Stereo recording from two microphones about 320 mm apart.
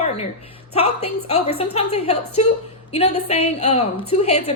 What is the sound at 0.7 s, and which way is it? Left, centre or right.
A woman's voice, centre.